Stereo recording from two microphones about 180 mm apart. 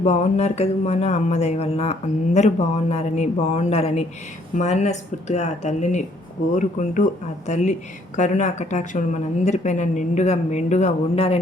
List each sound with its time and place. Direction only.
0.0 s speech: 40° left (ahead or behind)